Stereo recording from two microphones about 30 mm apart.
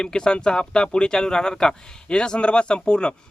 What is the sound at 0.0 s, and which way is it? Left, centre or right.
Speech, left.